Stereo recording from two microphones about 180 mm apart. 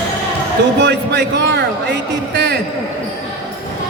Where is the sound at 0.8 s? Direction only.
70° right (ahead or behind).